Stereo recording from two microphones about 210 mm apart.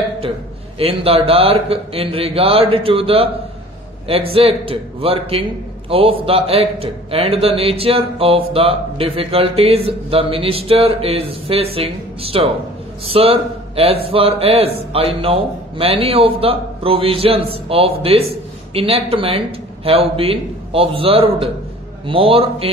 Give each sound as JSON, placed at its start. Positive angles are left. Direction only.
{"t": 0.7, "sound": "a man's voice", "side_deg": -25}